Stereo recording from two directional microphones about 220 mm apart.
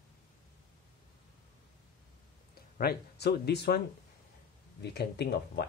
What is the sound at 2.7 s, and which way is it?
Speech, 45° left (ahead or behind).